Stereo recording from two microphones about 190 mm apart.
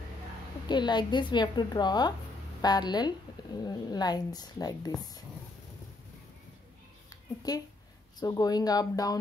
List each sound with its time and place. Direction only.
0.7 s speech: 25° left (ahead or behind)
8.2 s speech: 20° left (ahead or behind)